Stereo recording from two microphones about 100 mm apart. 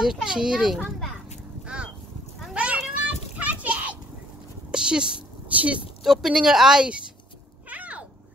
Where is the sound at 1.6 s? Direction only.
10° right (ahead or behind).